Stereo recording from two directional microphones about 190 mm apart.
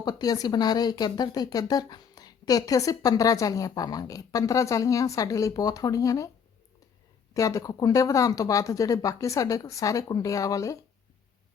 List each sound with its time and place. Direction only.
0.0 s a woman's voice: 20° left (ahead or behind)
7.3 s speech: 15° left (ahead or behind)